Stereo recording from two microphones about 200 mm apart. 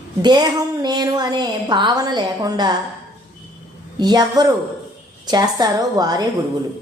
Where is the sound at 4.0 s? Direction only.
20° right (ahead or behind).